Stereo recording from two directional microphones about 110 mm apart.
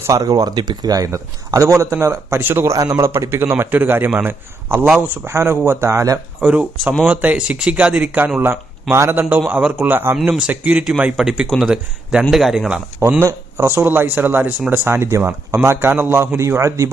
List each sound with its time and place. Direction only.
0.1 s speech: 35° right (ahead or behind)
6.4 s speech: 10° right (ahead or behind)
13.0 s speech: 20° right (ahead or behind)